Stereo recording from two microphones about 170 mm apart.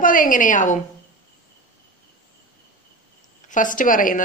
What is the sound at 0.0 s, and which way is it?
Speech, 50° left (ahead or behind).